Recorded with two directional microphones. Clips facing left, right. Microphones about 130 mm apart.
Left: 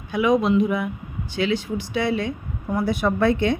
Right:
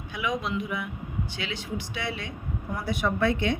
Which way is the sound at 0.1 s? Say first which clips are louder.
Left 11 dB; 35° left (ahead or behind).